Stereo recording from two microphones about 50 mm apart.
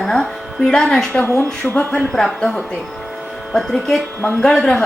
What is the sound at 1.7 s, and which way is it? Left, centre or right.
Speech, left.